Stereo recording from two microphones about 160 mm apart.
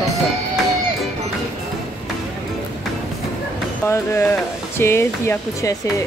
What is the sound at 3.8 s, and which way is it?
Speech, 15° left (ahead or behind).